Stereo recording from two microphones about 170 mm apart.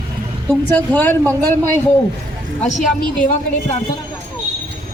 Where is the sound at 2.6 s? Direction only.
45° left (ahead or behind).